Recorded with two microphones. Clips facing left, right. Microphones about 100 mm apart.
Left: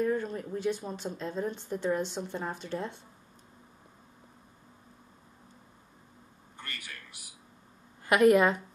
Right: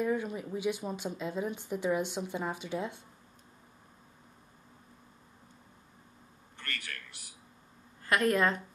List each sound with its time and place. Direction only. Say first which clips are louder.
0.0 s speech: left 2 dB; 10° right (ahead or behind)
6.5 s a sound: right 2 dB; 10° left (ahead or behind)
8.0 s a woman's voice: left 6 dB; 15° left (ahead or behind)